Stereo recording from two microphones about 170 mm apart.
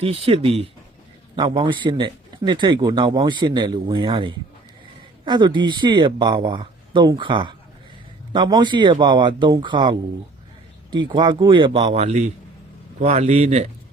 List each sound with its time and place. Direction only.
0.0 s a man's voice: 35° right (ahead or behind)
10.9 s a man's voice: 25° right (ahead or behind)